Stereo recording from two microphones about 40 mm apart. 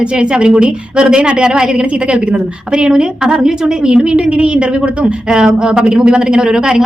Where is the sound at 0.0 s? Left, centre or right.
Right.